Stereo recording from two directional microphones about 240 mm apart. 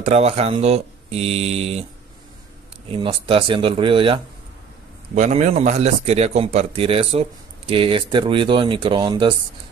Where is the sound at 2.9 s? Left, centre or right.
Right.